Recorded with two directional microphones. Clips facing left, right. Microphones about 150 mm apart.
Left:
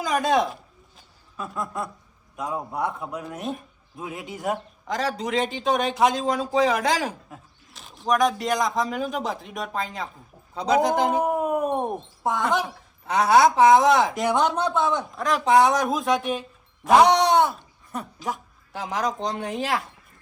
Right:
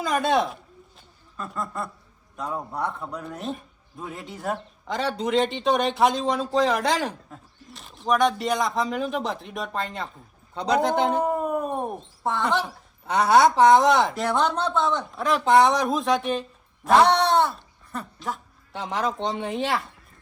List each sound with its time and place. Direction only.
0.0 s a sound: centre (ahead or behind)
2.3 s a man's voice: 5° left (ahead or behind)
11.7 s speech: 20° left (ahead or behind)
12.2 s a man's voice: centre (ahead or behind)
17.0 s speech: 15° left (ahead or behind)
17.4 s speech: 5° left (ahead or behind)